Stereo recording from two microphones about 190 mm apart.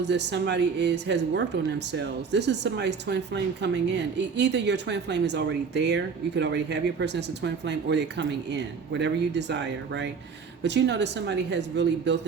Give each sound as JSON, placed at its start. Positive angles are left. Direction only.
{"t": 0.0, "sound": "speech", "side_deg": -65}